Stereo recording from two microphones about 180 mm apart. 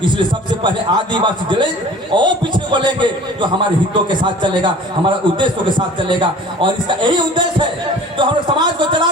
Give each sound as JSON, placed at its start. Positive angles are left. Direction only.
{"t": 0.6, "sound": "a man's voice", "side_deg": -25}
{"t": 4.2, "sound": "a man's voice", "side_deg": -25}